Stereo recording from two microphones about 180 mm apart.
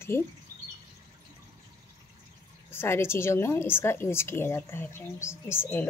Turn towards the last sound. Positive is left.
turn(degrees=15)  # may be behind; listen again after turning